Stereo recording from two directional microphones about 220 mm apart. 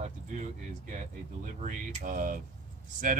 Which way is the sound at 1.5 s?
35° right (ahead or behind).